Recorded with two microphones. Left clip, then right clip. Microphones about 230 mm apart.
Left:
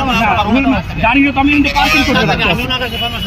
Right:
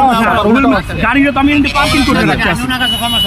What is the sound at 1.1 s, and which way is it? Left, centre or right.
Speech, right.